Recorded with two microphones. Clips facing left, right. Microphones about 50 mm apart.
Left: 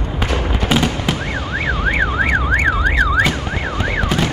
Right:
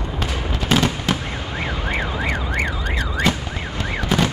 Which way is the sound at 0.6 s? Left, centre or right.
Centre.